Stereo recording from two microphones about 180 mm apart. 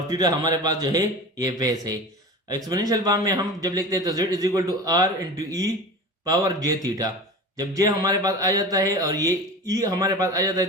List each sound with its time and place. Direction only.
0.1 s a man's voice: 20° right (ahead or behind)